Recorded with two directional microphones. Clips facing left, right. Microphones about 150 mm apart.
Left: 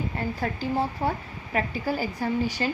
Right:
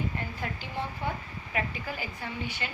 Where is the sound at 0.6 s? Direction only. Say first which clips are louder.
Left 10 dB; 40° left (ahead or behind).